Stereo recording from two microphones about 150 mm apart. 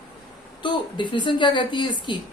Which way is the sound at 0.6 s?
30° left (ahead or behind).